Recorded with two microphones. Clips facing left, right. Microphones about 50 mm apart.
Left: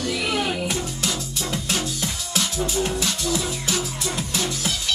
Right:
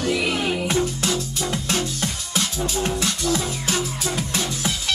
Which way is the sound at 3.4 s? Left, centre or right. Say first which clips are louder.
Right 1 dB; right.